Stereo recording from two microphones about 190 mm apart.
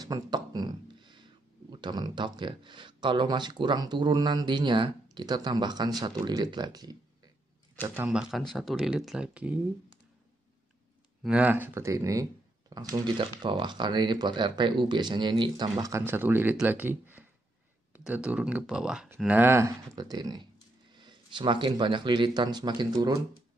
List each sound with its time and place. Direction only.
0.0 s a sound: 20° right (ahead or behind)
1.7 s speech: 25° right (ahead or behind)
7.8 s speech: 10° right (ahead or behind)
11.2 s speech: 5° right (ahead or behind)